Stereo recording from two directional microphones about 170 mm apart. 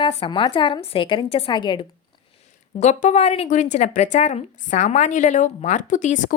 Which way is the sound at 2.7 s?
40° left (ahead or behind).